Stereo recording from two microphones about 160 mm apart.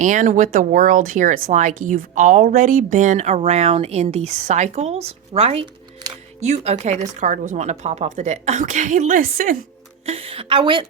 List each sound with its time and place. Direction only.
0.0 s speech: 50° right (ahead or behind)
10.1 s a woman's voice: 40° right (ahead or behind)